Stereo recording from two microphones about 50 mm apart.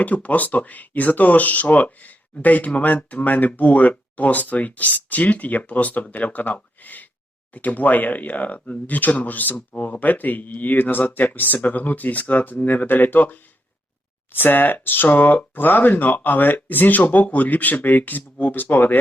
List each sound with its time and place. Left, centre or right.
0.0 s speech: left